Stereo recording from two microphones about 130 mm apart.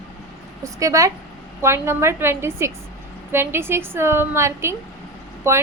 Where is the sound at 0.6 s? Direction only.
25° right (ahead or behind).